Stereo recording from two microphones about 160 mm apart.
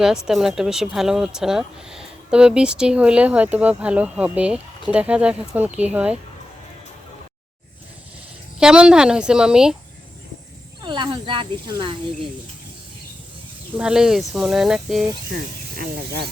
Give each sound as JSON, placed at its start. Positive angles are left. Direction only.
{"t": 0.0, "sound": "speech", "side_deg": -5}
{"t": 8.5, "sound": "speech", "side_deg": -5}
{"t": 10.8, "sound": "speech", "side_deg": -30}
{"t": 13.7, "sound": "speech", "side_deg": -5}
{"t": 15.3, "sound": "speech", "side_deg": -65}